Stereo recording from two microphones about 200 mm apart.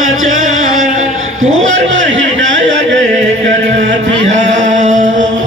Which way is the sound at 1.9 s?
65° right (ahead or behind).